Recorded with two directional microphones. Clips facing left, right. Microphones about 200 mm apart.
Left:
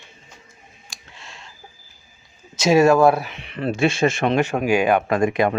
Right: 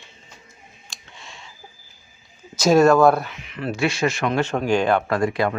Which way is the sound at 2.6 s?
5° left (ahead or behind).